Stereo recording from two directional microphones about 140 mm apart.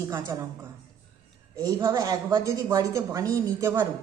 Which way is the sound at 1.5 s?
30° right (ahead or behind).